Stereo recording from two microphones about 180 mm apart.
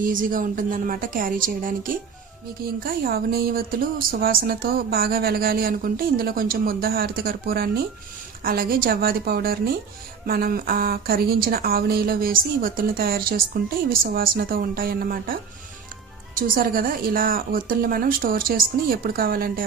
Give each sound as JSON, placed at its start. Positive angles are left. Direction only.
{"t": 0.0, "sound": "a woman's voice", "side_deg": -50}